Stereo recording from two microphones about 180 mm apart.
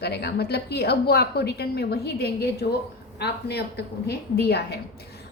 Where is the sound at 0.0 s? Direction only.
65° left (ahead or behind).